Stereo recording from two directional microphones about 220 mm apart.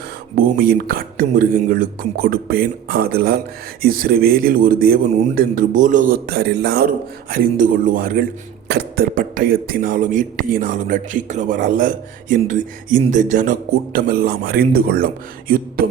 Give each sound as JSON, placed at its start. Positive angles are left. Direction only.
{"t": 0.3, "sound": "a man's voice", "side_deg": -40}